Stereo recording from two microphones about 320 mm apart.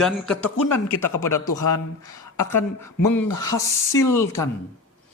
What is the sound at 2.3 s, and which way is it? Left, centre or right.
Speech, centre.